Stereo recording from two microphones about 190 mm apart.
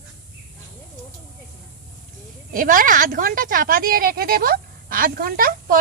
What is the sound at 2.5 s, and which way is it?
Speech, 45° right (ahead or behind).